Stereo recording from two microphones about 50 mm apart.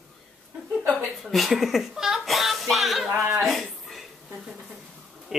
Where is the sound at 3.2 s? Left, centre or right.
Right.